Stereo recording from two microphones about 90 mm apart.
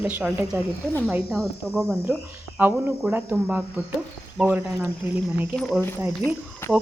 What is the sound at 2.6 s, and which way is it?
Speech, 20° right (ahead or behind).